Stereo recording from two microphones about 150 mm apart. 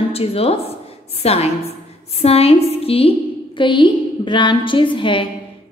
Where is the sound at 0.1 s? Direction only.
40° left (ahead or behind).